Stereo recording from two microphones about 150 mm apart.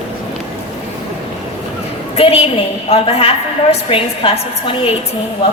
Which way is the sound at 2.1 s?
40° left (ahead or behind).